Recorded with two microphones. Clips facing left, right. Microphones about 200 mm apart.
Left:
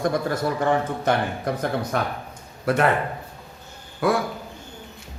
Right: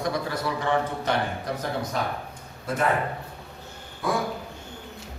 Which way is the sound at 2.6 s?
70° left (ahead or behind).